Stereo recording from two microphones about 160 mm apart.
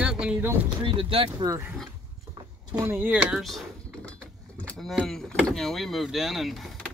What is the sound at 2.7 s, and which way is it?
Speech, 10° right (ahead or behind).